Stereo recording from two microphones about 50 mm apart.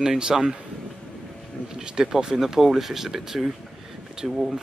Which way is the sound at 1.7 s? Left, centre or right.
Centre.